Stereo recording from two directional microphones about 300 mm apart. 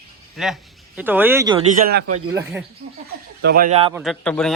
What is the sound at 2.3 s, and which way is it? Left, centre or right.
Speech, centre.